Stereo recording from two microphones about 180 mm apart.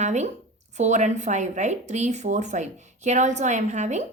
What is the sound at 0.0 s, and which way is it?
Speech, 40° right (ahead or behind).